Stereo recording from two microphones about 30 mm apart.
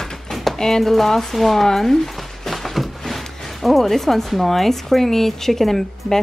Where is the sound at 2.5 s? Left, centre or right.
Centre.